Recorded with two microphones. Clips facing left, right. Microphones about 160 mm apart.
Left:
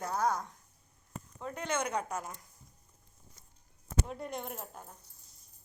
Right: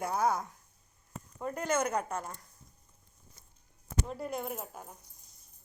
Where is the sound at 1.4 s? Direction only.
5° right (ahead or behind).